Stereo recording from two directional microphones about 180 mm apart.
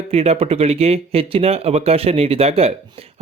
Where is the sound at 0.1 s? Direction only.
35° right (ahead or behind).